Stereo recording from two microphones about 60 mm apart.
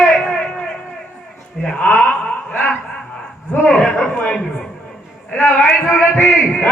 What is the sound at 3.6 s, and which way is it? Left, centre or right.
A man's voice, centre.